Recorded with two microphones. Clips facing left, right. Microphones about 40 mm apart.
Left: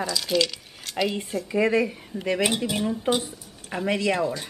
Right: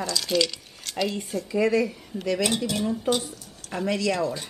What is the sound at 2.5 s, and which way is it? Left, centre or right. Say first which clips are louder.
Speech: even; centre.